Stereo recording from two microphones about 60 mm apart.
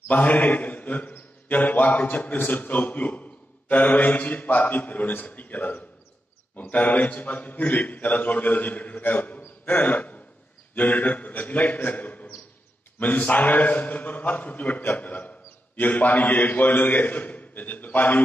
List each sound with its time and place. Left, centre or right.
0.1 s a man's voice: left
9.7 s a sound: left
10.7 s a man's voice: left